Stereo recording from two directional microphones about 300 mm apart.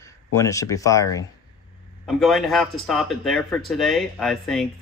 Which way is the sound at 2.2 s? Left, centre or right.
Centre.